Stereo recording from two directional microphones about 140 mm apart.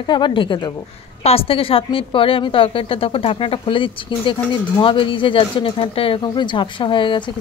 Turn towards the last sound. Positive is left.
turn(degrees=35)  # may be behind; listen again after turning